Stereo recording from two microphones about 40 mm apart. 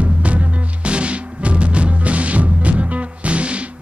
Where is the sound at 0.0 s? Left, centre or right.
Right.